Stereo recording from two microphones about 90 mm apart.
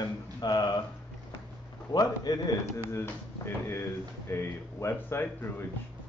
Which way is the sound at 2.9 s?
30° left (ahead or behind).